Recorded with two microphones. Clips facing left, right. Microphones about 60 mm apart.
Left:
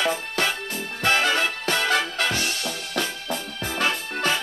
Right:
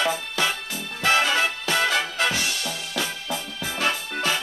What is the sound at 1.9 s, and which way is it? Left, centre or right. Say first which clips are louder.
Music: even; left.